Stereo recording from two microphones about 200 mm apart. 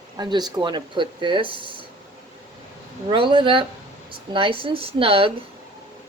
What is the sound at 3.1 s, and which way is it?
Speech, 25° right (ahead or behind).